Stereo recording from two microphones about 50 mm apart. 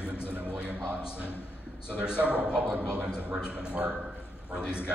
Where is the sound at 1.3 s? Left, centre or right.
Left.